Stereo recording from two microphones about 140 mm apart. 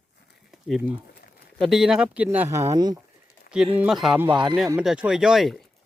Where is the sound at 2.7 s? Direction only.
30° right (ahead or behind).